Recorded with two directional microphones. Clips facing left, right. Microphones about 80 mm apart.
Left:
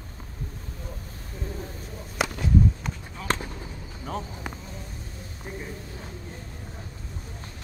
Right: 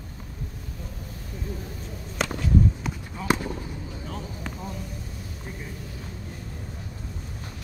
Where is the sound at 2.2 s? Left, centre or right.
Centre.